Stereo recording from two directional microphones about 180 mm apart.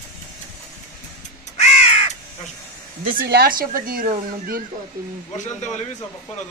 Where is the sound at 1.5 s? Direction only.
35° left (ahead or behind).